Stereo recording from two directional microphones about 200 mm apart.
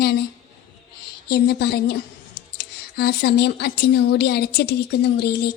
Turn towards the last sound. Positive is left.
turn(degrees=55)  # may be behind; listen again after turning